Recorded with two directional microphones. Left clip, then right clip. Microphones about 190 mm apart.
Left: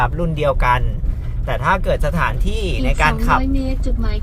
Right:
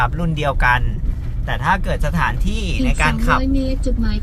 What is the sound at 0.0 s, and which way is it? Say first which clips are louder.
Speech: left 2 dB; 5° left (ahead or behind).